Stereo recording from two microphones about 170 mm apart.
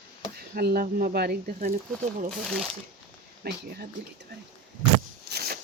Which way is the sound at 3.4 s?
70° right (ahead or behind).